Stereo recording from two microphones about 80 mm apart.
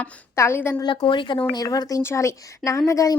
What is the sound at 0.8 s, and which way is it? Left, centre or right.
Speech, left.